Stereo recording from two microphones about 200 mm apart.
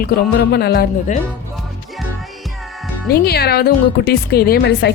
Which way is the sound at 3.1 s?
50° left (ahead or behind).